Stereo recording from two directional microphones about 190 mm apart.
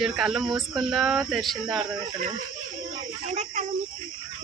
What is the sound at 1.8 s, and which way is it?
Speech, 35° right (ahead or behind).